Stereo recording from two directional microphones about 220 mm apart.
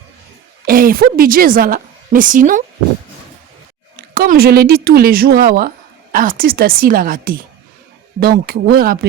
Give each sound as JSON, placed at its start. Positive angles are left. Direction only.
{"t": 0.6, "sound": "a woman's voice", "side_deg": -40}
{"t": 3.9, "sound": "speech", "side_deg": -40}